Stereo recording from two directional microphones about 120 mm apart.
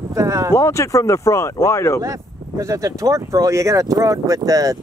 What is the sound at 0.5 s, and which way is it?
Speech, 25° left (ahead or behind).